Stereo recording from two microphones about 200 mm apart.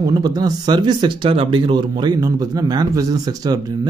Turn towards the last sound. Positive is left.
turn(degrees=-20)  # may be behind; listen again after turning